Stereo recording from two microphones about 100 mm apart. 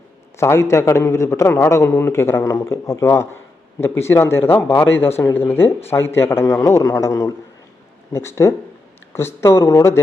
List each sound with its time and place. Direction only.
0.3 s a man's voice: 25° left (ahead or behind)